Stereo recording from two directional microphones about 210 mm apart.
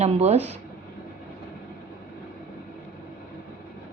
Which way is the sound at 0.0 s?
30° right (ahead or behind).